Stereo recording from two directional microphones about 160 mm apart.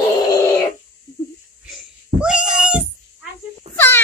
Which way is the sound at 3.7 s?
40° right (ahead or behind).